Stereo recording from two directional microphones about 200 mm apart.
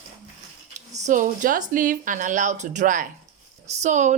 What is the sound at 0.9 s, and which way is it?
A woman's voice, 40° right (ahead or behind).